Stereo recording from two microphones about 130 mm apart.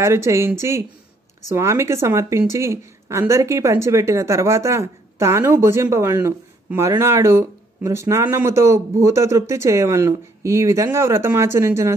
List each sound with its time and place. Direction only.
0.0 s a woman's voice: 20° right (ahead or behind)